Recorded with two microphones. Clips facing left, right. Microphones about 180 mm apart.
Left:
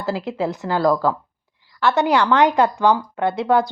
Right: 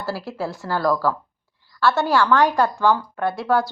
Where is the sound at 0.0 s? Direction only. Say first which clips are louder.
Left 4 dB; 20° left (ahead or behind).